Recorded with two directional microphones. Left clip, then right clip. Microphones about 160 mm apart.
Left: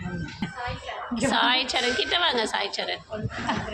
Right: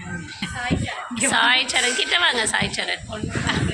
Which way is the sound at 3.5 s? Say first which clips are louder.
Right 4 dB; 50° left (ahead or behind).